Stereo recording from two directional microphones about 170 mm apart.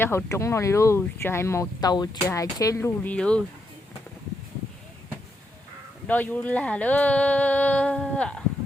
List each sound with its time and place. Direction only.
0.0 s speech: 15° left (ahead or behind)
6.1 s speech: 10° left (ahead or behind)